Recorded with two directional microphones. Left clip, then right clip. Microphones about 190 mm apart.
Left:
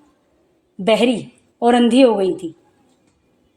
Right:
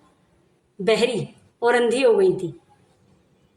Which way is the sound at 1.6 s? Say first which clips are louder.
Left 5 dB; 45° left (ahead or behind).